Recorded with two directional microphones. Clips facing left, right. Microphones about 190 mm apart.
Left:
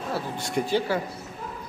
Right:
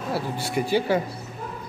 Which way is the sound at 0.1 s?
5° right (ahead or behind).